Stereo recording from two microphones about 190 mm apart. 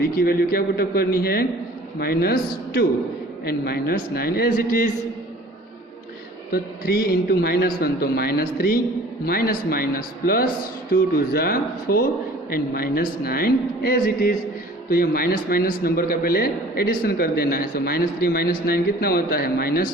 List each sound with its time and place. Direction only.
0.0 s a man's voice: 50° left (ahead or behind)
6.5 s a man's voice: 55° left (ahead or behind)